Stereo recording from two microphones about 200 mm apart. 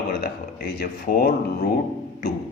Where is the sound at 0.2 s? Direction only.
50° left (ahead or behind).